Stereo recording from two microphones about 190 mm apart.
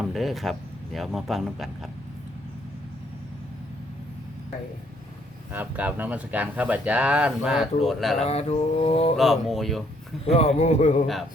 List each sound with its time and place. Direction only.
0.0 s speech: centre (ahead or behind)
5.5 s speech: 10° right (ahead or behind)
8.2 s mantra: 35° left (ahead or behind)
9.1 s speech: centre (ahead or behind)
10.2 s mantra: 35° left (ahead or behind)
11.0 s speech: centre (ahead or behind)